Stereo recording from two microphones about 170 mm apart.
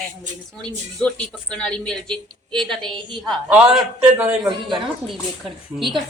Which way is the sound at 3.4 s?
10° right (ahead or behind).